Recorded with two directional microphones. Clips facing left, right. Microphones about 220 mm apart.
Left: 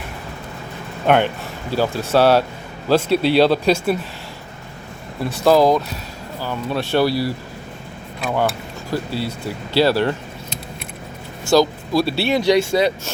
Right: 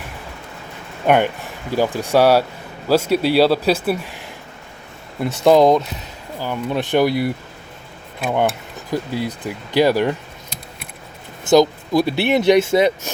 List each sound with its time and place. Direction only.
1.0 s speech: 10° right (ahead or behind)
5.2 s speech: 20° right (ahead or behind)
8.9 s speech: 15° right (ahead or behind)
11.4 s speech: 20° right (ahead or behind)